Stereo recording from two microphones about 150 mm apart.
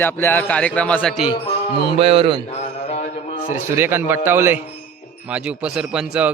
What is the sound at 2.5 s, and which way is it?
Mantra, 50° left (ahead or behind).